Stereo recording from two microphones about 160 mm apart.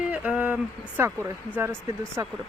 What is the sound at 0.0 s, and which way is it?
Speech, 10° right (ahead or behind).